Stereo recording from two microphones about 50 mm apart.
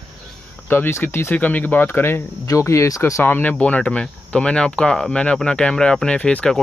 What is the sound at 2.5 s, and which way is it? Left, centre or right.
Speech, left.